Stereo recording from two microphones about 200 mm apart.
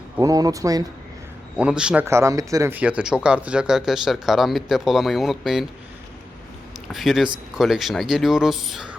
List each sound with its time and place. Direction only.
0.2 s speech: 20° right (ahead or behind)
1.5 s speech: 5° right (ahead or behind)
6.9 s speech: centre (ahead or behind)